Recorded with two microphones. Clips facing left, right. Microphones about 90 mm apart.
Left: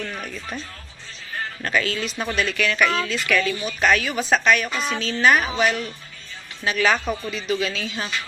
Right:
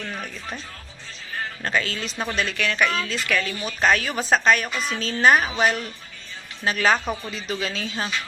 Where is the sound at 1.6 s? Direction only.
30° right (ahead or behind).